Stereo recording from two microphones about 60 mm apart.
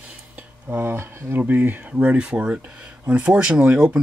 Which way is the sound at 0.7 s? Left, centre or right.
Right.